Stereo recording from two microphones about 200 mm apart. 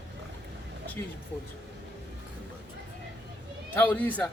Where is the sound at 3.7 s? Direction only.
10° left (ahead or behind).